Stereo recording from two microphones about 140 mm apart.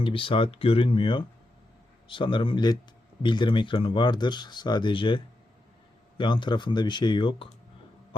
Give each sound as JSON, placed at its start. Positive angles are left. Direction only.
{"t": 0.0, "sound": "speech", "side_deg": 40}